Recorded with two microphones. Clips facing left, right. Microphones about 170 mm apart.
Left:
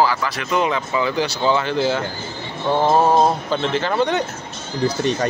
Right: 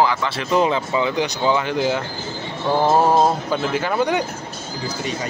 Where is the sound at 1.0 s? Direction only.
15° right (ahead or behind).